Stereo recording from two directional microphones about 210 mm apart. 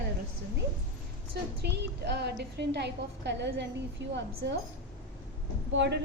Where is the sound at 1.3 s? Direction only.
50° right (ahead or behind).